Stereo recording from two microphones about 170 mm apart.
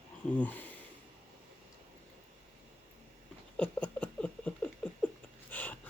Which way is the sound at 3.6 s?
10° left (ahead or behind).